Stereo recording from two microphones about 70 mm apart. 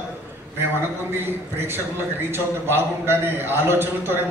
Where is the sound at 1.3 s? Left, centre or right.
Right.